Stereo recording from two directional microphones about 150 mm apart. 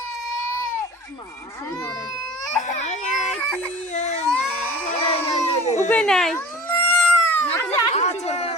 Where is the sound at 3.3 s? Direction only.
10° left (ahead or behind).